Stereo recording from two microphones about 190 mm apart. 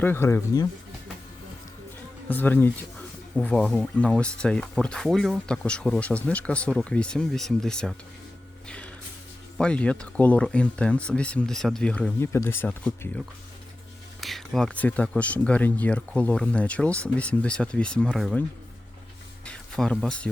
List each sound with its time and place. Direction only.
0.0 s speech: 10° left (ahead or behind)
2.3 s speech: 10° left (ahead or behind)
8.6 s music: 5° left (ahead or behind)
9.6 s speech: 5° left (ahead or behind)
19.5 s speech: 5° left (ahead or behind)